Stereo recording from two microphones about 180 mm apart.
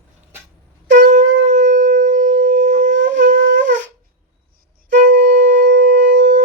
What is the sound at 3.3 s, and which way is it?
Wind instrument, 85° right.